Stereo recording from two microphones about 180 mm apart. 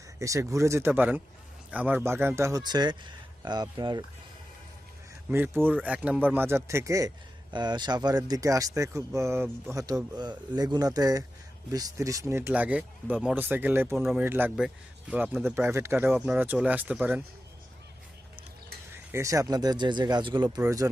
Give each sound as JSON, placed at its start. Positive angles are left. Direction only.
{"t": 0.2, "sound": "speech", "side_deg": -15}
{"t": 5.3, "sound": "speech", "side_deg": -10}
{"t": 19.1, "sound": "speech", "side_deg": -15}